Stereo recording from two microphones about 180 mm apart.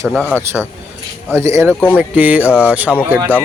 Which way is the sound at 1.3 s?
15° right (ahead or behind).